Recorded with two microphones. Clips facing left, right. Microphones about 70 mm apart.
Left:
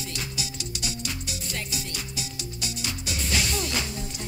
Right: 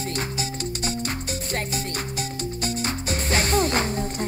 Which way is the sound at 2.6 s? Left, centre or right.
Right.